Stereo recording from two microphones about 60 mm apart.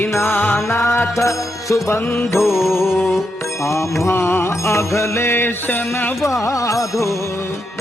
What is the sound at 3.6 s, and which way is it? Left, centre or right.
Music, left.